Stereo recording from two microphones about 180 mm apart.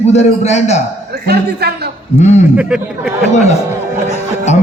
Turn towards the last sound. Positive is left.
turn(degrees=40)  # may be behind; listen again after turning